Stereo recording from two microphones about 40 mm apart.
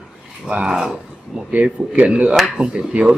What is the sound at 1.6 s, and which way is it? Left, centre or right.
Speech, right.